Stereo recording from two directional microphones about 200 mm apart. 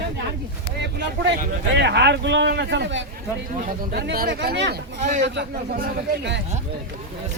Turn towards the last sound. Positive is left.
turn(degrees=-55)  # may be behind; listen again after turning